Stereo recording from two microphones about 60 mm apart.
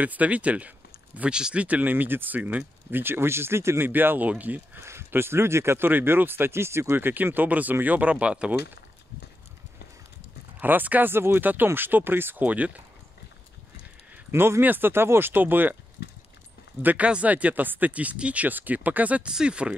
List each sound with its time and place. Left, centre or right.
0.0 s speech: right
4.8 s speech: right
5.9 s speech: right; by 8.5 s centre
10.6 s speech: right
14.3 s speech: right
14.6 s speech: right
16.8 s speech: right